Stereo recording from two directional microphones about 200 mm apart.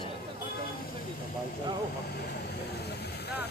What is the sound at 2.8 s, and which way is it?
Vehicle, 55° left (ahead or behind).